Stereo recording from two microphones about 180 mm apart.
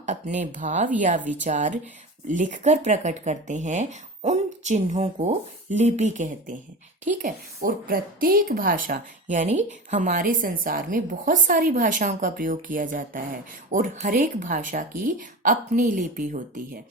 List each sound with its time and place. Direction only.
0.0 s speech: 40° right (ahead or behind)
1.2 s speech: 10° right (ahead or behind)
1.5 s a woman's voice: 45° right (ahead or behind)